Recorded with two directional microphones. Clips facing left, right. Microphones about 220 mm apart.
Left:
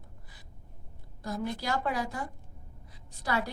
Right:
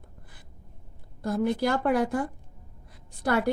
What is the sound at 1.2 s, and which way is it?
A woman's voice, 55° right (ahead or behind).